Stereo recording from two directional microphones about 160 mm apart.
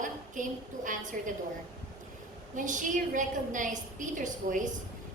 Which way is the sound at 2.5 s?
55° right (ahead or behind).